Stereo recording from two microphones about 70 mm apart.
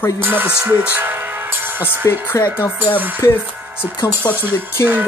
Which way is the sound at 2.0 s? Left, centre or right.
Left.